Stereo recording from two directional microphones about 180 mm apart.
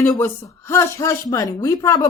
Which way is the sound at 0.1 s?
15° left (ahead or behind).